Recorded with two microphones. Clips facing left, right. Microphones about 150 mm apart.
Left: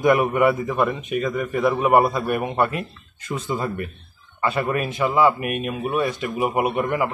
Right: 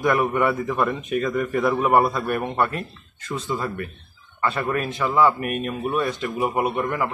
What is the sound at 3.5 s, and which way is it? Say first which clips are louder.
A man's voice: left 2 dB; 20° left (ahead or behind).